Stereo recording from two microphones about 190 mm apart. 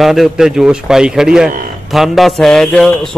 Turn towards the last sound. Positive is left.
turn(degrees=0)  # may be behind; listen again after turning